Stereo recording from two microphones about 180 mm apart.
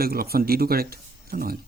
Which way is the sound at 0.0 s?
55° right (ahead or behind).